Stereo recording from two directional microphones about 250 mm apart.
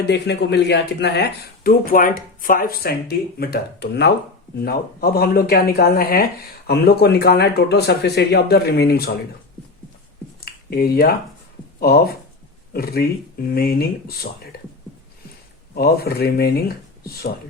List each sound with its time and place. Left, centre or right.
0.1 s speech: left
10.4 s a sound: left
12.7 s speech: left
15.7 s speech: left